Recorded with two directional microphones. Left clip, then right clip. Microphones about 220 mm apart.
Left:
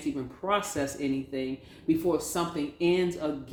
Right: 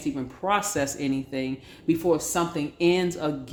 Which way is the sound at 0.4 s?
45° right (ahead or behind).